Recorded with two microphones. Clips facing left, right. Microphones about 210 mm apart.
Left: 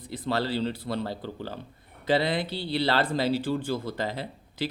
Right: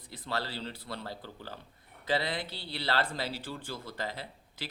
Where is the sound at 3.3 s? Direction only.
75° left (ahead or behind).